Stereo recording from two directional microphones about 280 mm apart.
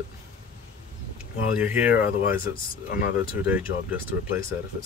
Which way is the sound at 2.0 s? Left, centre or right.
Left.